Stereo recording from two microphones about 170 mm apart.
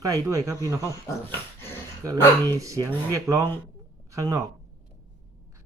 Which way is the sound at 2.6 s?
20° right (ahead or behind).